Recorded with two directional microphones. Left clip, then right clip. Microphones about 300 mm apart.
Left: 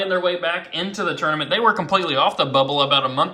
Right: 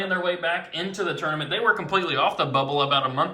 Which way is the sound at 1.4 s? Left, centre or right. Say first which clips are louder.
Left 4 dB; centre.